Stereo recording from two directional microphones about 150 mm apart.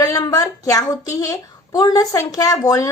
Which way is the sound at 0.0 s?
25° left (ahead or behind).